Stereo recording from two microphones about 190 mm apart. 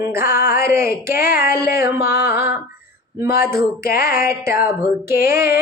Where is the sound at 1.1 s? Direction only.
55° left (ahead or behind).